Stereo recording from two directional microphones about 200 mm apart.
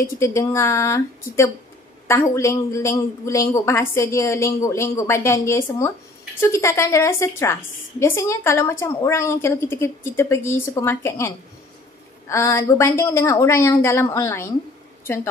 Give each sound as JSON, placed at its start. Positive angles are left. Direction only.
{"t": 0.0, "sound": "a woman's voice", "side_deg": 15}